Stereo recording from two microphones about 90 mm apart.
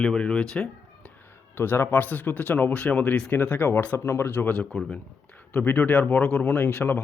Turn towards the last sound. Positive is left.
turn(degrees=25)  # may be behind; listen again after turning